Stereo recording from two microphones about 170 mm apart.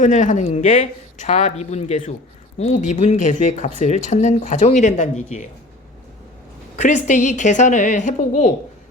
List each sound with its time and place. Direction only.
0.0 s speech: 45° left (ahead or behind)
6.7 s speech: 45° left (ahead or behind)